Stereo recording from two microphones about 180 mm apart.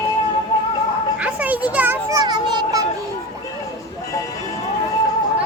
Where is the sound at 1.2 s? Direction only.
10° right (ahead or behind); by 2.8 s 25° right (ahead or behind).